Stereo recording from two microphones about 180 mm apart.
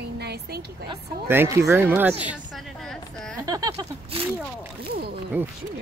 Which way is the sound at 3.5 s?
20° right (ahead or behind).